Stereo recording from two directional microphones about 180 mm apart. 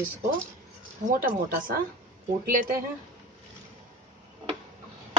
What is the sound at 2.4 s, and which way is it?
Speech, 55° right (ahead or behind).